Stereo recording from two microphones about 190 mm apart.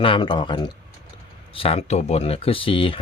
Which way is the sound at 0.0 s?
25° left (ahead or behind).